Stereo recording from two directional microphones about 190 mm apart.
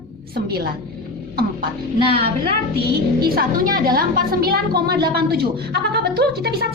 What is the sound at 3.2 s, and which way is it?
A woman's voice, 50° right (ahead or behind).